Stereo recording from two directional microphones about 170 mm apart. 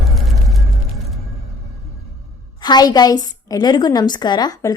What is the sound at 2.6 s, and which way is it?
A woman's voice, 25° left (ahead or behind).